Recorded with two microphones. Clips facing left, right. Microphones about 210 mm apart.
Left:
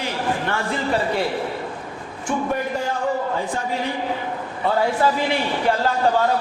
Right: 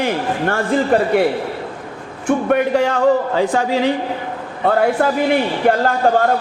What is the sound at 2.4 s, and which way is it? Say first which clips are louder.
A man's voice: right 8 dB; 70° right (ahead or behind).